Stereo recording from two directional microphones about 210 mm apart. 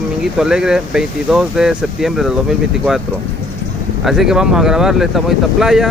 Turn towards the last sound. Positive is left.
turn(degrees=0)  # may be behind; listen again after turning